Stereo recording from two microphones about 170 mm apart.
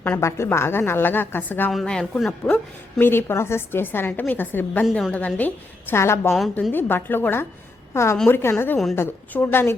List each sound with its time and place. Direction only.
0.0 s a woman's voice: 15° left (ahead or behind)
6.3 s a woman's voice: 5° left (ahead or behind)